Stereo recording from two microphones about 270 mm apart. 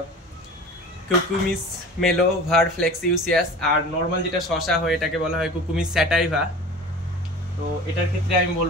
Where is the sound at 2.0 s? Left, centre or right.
Centre.